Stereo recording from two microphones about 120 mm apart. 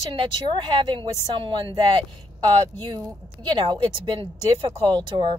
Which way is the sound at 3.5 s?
45° right (ahead or behind).